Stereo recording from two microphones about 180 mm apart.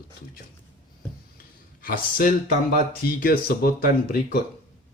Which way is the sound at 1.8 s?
55° left (ahead or behind).